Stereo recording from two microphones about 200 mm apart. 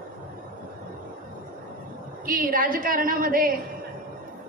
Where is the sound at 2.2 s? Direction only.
45° right (ahead or behind).